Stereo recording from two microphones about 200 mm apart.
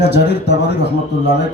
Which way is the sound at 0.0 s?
55° left (ahead or behind).